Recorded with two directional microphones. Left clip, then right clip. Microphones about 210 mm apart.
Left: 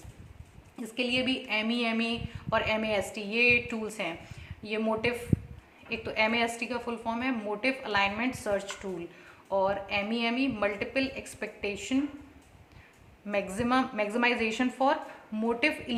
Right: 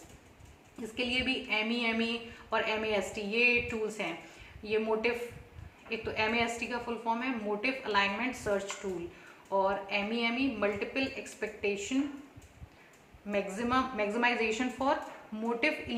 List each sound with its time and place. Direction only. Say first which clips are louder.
0.9 s speech: left 2 dB; 55° left (ahead or behind)
13.2 s speech: left 3 dB; 50° left (ahead or behind)